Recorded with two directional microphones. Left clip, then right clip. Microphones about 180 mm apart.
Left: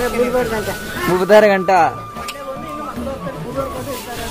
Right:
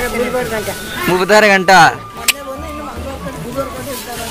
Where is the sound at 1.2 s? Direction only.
10° left (ahead or behind).